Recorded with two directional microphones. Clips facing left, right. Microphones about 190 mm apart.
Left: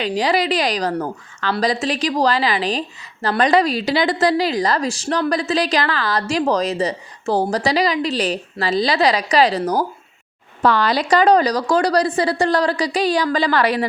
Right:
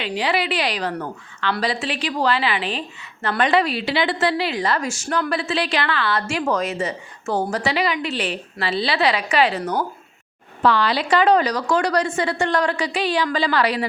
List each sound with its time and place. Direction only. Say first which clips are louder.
0.0 s speech: left 4 dB; 40° left (ahead or behind)